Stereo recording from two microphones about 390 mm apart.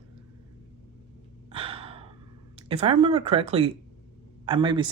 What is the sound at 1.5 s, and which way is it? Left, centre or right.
Gasp, centre.